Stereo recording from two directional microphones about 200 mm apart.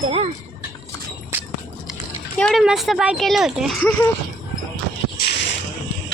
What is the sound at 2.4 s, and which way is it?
Speech, centre (ahead or behind).